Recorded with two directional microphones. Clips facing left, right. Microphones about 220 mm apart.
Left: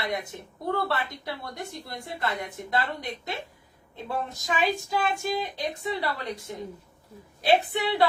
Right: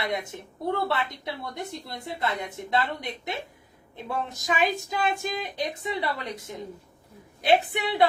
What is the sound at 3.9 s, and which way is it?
A woman's voice, 15° right (ahead or behind).